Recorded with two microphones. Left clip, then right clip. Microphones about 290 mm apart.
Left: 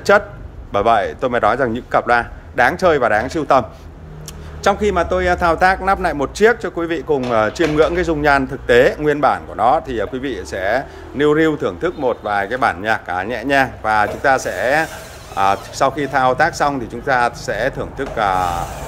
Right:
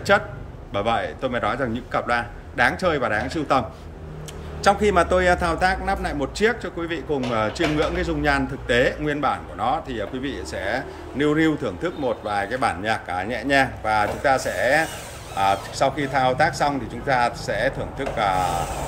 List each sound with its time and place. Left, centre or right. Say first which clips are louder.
0.1 s speech: left 6 dB; centre